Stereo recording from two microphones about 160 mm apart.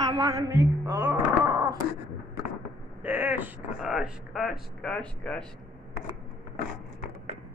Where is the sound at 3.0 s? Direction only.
10° right (ahead or behind).